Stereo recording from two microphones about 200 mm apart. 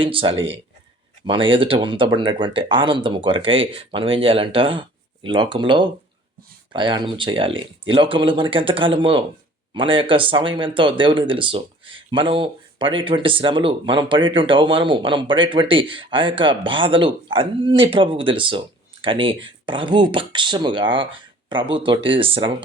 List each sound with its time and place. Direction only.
0.0 s speech: 25° right (ahead or behind)